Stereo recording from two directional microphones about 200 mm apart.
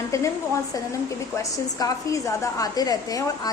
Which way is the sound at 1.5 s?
15° left (ahead or behind).